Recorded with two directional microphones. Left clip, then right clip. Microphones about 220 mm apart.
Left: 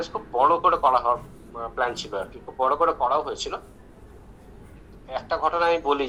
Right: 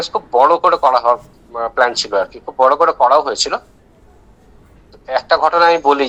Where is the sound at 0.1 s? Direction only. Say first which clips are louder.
Right 9 dB; 50° right (ahead or behind).